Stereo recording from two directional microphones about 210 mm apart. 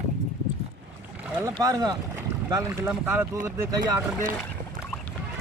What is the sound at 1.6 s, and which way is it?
Speech, 15° right (ahead or behind).